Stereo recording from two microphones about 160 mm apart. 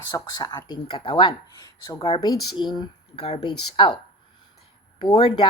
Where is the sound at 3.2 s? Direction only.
40° left (ahead or behind).